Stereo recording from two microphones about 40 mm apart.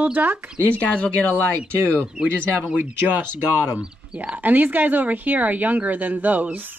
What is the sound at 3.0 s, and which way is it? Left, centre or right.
Speech, right.